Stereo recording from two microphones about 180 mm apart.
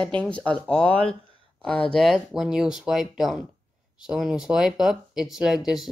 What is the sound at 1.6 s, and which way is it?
Speech, 5° left (ahead or behind).